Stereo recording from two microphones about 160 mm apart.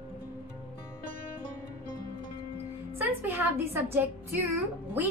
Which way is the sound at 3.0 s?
15° right (ahead or behind).